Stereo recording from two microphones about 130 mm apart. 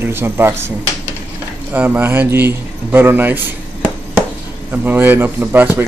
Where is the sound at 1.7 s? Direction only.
10° right (ahead or behind).